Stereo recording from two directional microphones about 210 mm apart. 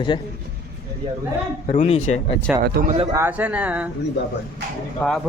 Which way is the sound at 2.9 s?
25° right (ahead or behind).